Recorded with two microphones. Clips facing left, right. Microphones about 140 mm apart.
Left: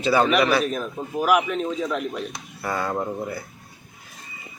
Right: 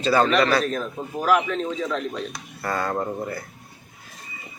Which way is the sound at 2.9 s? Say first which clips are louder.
Even; 5° right (ahead or behind).